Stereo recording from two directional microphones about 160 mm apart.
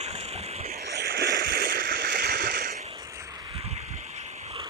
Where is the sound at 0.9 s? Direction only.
80° right; by 2.0 s 55° right (ahead or behind).